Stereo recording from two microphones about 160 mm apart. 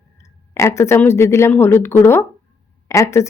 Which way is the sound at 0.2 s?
20° left (ahead or behind).